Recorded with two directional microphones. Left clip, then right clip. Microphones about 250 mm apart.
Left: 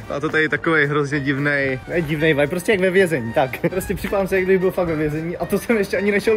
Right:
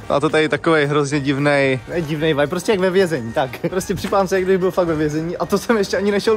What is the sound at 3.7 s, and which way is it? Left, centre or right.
Speech, centre.